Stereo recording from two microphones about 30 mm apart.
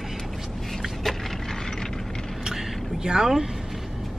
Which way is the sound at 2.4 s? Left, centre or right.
Centre.